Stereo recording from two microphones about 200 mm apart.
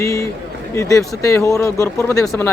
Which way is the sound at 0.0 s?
15° left (ahead or behind).